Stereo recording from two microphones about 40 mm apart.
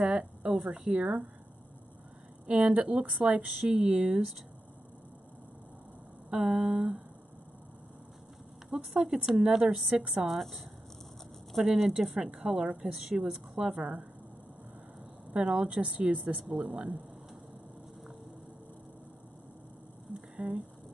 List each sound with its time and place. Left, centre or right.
0.0 s a sound: right
0.7 s speech: right
2.4 s speech: right
3.6 s a woman's voice: centre
6.3 s a woman's voice: centre
8.7 s a woman's voice: centre
10.2 s speech: centre
12.1 s a woman's voice: right
15.3 s speech: right
16.4 s speech: centre
20.3 s speech: right